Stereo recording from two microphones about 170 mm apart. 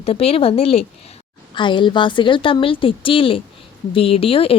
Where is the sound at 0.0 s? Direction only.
35° left (ahead or behind).